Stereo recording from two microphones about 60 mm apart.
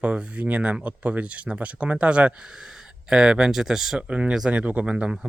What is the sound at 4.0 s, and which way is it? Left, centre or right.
Speech, centre.